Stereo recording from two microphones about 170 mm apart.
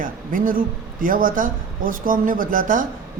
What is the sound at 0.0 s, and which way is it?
A woman's voice, 50° right (ahead or behind).